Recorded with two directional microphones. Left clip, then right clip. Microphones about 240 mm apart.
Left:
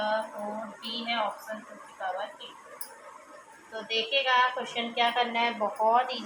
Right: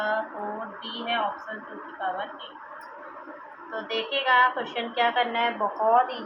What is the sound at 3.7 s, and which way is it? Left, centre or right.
A woman's voice, centre.